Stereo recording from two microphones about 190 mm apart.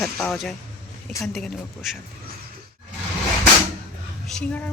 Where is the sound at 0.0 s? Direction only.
5° left (ahead or behind).